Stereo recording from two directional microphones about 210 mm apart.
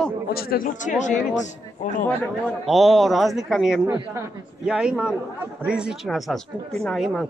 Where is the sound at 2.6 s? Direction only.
Centre (ahead or behind).